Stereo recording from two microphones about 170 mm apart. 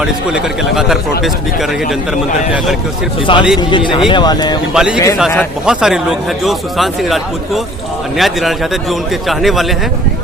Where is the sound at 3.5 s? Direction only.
30° left (ahead or behind).